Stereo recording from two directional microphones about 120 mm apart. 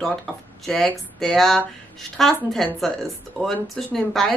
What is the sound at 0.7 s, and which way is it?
Speech, centre (ahead or behind).